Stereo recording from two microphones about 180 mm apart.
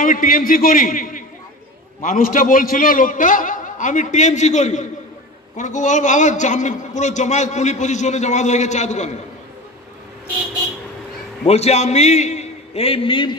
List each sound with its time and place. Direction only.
0.0 s a man's voice: 50° left (ahead or behind)
11.4 s a man's voice: 35° left (ahead or behind)